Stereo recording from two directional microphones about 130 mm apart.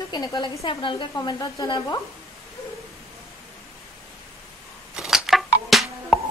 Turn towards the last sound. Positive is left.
turn(degrees=0)  # may be behind; listen again after turning